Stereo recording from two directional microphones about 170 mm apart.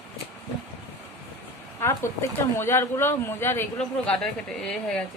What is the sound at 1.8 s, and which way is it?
Speech, 15° left (ahead or behind).